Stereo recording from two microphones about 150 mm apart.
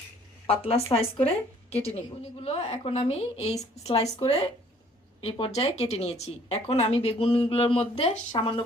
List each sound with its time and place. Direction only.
0.4 s speech: 40° left (ahead or behind)
2.4 s speech: 45° left (ahead or behind)